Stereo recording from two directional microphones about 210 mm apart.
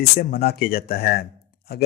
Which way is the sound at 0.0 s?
45° left (ahead or behind).